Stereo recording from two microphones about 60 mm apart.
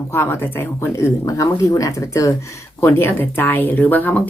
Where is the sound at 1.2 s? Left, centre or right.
Left.